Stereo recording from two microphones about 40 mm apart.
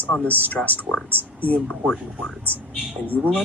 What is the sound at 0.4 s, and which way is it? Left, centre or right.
Speech, left.